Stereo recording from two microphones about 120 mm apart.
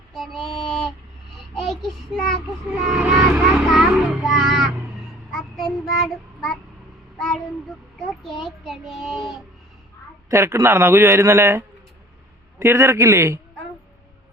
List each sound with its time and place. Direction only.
0.1 s female singing: centre (ahead or behind)
1.5 s a sound: centre (ahead or behind)
2.7 s vehicle: 5° right (ahead or behind)
3.6 s music: centre (ahead or behind)
5.3 s child singing: centre (ahead or behind)
7.9 s a sound: centre (ahead or behind)
8.4 s child singing: centre (ahead or behind)
10.2 s a man's voice: 25° right (ahead or behind)